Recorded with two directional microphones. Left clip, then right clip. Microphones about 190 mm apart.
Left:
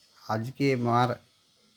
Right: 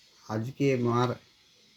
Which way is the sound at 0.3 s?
40° left (ahead or behind).